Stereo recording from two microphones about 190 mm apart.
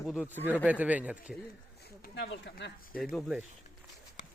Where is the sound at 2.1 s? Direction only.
65° left (ahead or behind).